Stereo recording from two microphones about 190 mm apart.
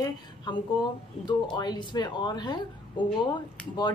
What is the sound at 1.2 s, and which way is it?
Speech, 20° left (ahead or behind).